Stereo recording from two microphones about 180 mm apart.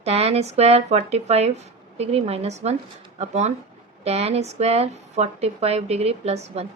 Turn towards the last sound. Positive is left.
turn(degrees=-35)  # may be behind; listen again after turning